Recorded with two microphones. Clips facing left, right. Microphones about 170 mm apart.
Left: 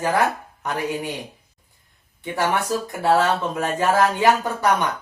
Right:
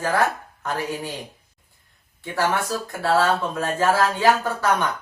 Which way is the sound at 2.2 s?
20° left (ahead or behind).